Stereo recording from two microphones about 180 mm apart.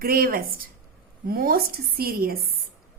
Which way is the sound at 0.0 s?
55° right (ahead or behind).